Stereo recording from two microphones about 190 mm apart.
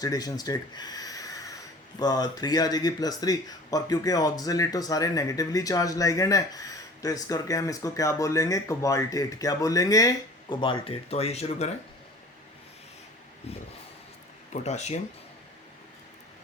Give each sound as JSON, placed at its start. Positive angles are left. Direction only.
{"t": 0.0, "sound": "speech", "side_deg": 20}
{"t": 13.5, "sound": "speech", "side_deg": 35}